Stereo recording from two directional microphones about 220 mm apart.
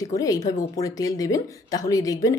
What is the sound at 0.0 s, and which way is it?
A woman's voice, 15° left (ahead or behind).